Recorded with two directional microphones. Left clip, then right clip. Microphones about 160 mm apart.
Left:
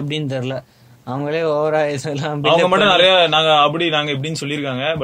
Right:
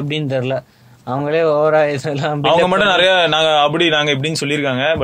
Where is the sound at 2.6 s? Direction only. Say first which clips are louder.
Left 2 dB; 45° right (ahead or behind).